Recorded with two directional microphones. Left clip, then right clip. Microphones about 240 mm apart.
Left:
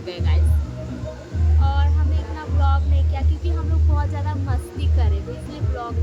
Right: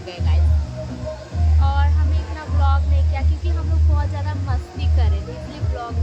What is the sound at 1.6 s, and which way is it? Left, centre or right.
Music, centre.